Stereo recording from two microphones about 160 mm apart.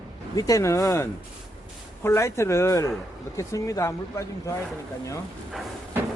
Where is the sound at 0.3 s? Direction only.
20° left (ahead or behind).